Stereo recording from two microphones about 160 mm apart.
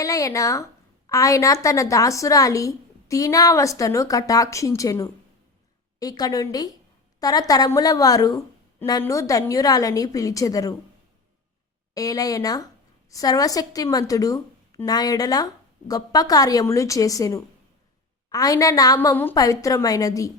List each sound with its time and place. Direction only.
0.0 s a woman's voice: 20° left (ahead or behind)
11.9 s a woman's voice: 20° left (ahead or behind)